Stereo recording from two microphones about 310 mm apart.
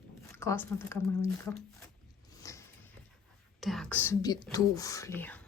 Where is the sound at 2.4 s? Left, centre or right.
Centre.